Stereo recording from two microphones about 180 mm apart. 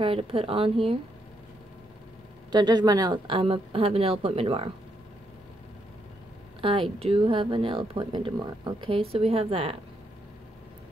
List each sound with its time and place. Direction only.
0.0 s a woman's voice: 30° right (ahead or behind)
2.5 s a woman's voice: 20° right (ahead or behind)
6.6 s speech: 30° right (ahead or behind)